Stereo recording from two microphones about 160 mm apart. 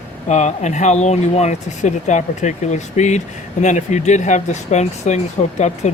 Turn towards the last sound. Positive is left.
turn(degrees=45)  # may be behind; listen again after turning